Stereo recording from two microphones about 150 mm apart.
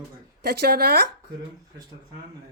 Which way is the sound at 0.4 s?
90° right.